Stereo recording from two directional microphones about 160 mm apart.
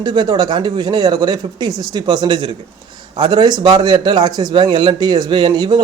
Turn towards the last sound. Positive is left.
turn(degrees=-25)  # may be behind; listen again after turning